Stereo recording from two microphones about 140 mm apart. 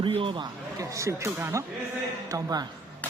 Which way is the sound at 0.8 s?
20° right (ahead or behind).